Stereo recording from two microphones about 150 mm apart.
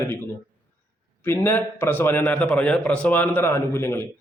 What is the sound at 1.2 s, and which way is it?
A man's voice, 15° left (ahead or behind).